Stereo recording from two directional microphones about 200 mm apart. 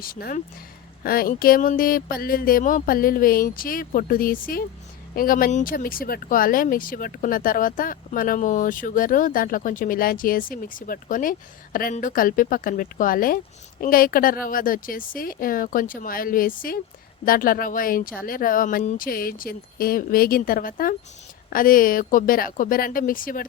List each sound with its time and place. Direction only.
0.0 s speech: 45° left (ahead or behind)